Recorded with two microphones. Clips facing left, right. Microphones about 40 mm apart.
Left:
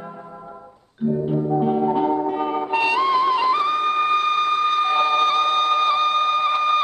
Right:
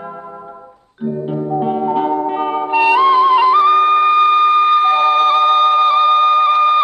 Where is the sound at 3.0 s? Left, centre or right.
Right.